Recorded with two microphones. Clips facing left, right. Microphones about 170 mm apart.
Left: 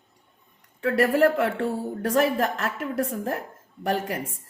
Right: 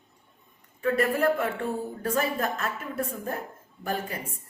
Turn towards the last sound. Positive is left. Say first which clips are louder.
# left 5 dB
turn(degrees=75)  # may be behind; listen again after turning